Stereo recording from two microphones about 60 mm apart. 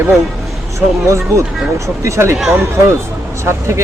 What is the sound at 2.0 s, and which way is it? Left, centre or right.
Speech, right.